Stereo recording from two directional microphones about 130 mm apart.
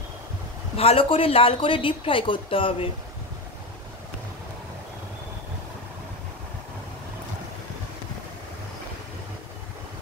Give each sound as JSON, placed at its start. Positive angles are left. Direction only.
{"t": 0.7, "sound": "speech", "side_deg": 45}